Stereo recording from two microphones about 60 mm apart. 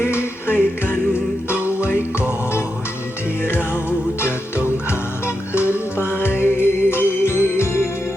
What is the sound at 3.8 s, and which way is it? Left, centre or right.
Music, left.